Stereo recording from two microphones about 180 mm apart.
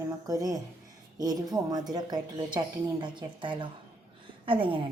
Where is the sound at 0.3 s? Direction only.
20° right (ahead or behind).